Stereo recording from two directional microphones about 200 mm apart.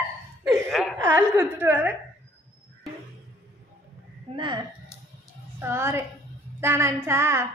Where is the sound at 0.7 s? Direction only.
Centre (ahead or behind).